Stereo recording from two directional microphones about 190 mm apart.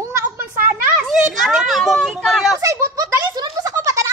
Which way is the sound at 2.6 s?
15° right (ahead or behind).